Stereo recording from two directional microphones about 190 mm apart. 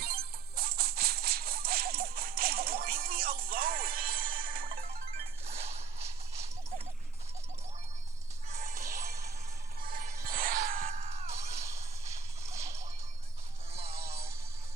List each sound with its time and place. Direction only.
0.0 s music: 50° right (ahead or behind)
5.5 s whip: 35° right (ahead or behind)
6.1 s horse: 15° right (ahead or behind)
8.4 s music: 40° right (ahead or behind)
10.9 s music: 35° right (ahead or behind)
11.6 s music: 15° right (ahead or behind)
14.1 s music: 15° right (ahead or behind)